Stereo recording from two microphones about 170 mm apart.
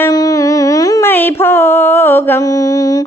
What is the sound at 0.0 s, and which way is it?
Music, 20° left (ahead or behind).